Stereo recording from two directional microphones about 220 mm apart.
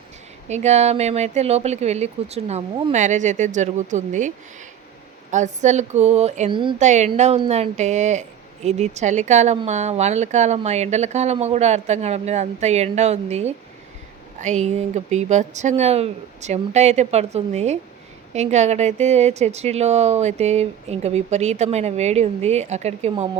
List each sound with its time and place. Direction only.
0.4 s a woman's voice: 30° right (ahead or behind)
5.3 s a woman's voice: 35° right (ahead or behind)